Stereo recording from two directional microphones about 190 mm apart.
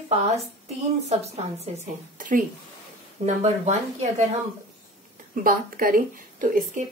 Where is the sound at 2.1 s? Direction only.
45° right (ahead or behind).